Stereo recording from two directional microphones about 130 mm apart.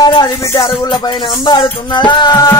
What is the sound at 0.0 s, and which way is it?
Music, 30° left (ahead or behind).